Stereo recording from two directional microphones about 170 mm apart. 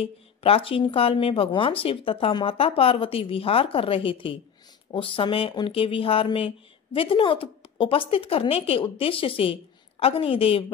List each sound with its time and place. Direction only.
0.0 s speech: 35° left (ahead or behind)